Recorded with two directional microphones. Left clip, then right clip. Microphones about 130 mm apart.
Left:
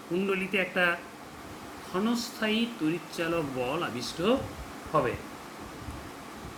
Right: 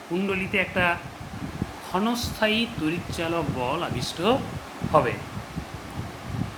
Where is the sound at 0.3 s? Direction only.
15° right (ahead or behind).